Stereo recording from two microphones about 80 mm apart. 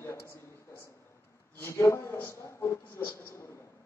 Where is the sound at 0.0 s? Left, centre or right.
Left.